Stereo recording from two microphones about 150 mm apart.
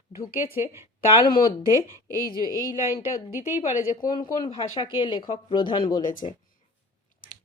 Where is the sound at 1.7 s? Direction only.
20° right (ahead or behind).